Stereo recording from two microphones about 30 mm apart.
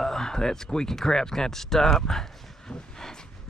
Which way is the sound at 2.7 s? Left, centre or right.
Left.